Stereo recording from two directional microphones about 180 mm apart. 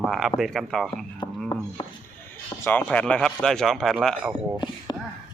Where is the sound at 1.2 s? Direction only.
25° left (ahead or behind).